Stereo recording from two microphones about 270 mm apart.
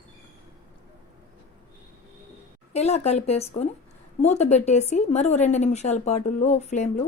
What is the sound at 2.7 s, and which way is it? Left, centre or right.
A woman's voice, left.